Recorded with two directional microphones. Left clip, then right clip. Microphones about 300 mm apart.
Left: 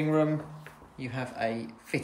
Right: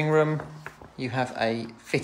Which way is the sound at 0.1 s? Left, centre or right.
Centre.